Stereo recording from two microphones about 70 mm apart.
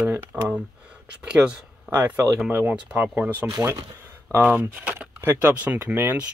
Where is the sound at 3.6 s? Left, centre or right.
Right.